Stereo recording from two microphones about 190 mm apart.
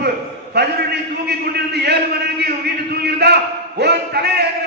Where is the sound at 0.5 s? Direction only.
60° right (ahead or behind).